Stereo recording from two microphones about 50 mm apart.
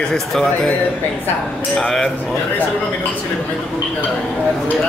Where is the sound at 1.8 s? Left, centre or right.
Centre.